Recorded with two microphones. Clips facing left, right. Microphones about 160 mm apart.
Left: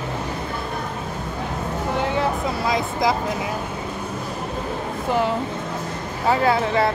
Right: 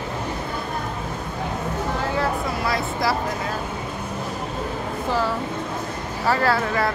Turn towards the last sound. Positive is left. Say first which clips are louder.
# left 2 dB
turn(degrees=25)  # may be behind; listen again after turning